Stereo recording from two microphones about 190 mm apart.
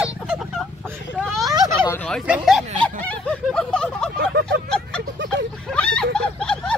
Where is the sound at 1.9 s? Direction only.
5° left (ahead or behind).